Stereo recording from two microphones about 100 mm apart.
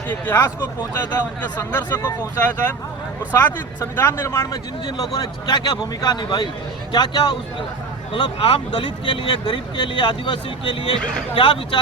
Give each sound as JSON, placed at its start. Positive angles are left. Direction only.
{"t": 0.1, "sound": "speech", "side_deg": 25}
{"t": 2.0, "sound": "speech", "side_deg": 35}
{"t": 4.9, "sound": "speech", "side_deg": 40}
{"t": 8.1, "sound": "speech", "side_deg": 60}